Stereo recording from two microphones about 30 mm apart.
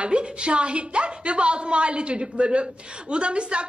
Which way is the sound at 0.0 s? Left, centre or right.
Right.